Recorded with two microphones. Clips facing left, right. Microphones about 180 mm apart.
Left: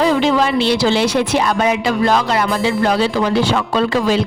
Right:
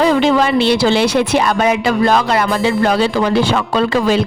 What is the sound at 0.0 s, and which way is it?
A woman's voice, 60° right (ahead or behind).